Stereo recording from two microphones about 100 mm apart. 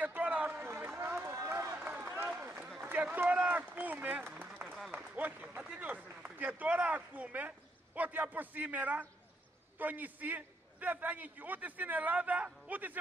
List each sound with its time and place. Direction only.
0.0 s run: 15° right (ahead or behind)
1.8 s run: 15° right (ahead or behind)
2.8 s a man's voice: 15° right (ahead or behind)
4.7 s applause: centre (ahead or behind)
5.1 s a man's voice: 15° right (ahead or behind)